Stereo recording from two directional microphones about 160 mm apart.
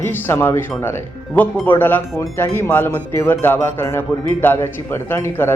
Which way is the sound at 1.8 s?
10° left (ahead or behind).